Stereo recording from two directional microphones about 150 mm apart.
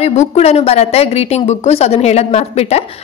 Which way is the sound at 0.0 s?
45° left (ahead or behind).